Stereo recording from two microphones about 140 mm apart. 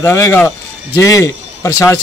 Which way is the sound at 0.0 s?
20° left (ahead or behind).